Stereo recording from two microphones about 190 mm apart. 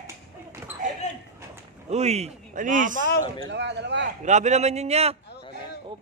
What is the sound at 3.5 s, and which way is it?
Speech, 65° right (ahead or behind).